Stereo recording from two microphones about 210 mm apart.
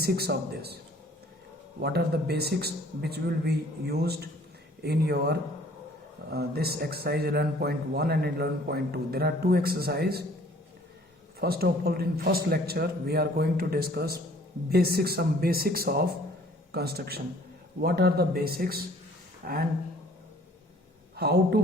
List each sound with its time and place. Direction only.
0.0 s a man's voice: 50° right (ahead or behind)
1.8 s a man's voice: 50° right (ahead or behind)
11.3 s a man's voice: 45° right (ahead or behind)
21.2 s a man's voice: 50° right (ahead or behind)